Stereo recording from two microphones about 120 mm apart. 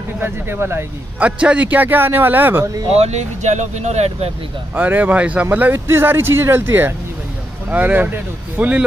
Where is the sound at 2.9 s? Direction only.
65° right (ahead or behind).